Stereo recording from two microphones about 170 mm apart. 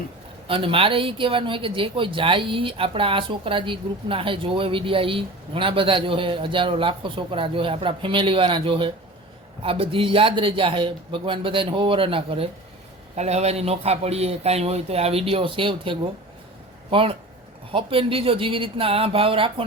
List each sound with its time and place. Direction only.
0.4 s speech: 30° right (ahead or behind)